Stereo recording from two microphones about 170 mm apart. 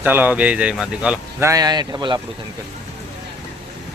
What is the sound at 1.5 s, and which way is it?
Speech, 20° right (ahead or behind).